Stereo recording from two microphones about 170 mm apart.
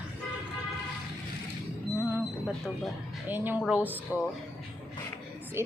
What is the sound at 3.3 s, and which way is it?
Speech, 10° right (ahead or behind).